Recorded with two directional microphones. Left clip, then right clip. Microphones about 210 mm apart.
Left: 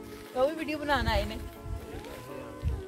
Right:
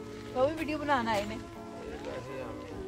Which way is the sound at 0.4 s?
45° left (ahead or behind).